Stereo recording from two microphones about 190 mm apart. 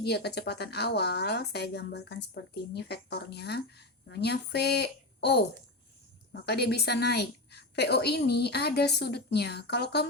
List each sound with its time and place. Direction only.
0.0 s speech: 60° left (ahead or behind)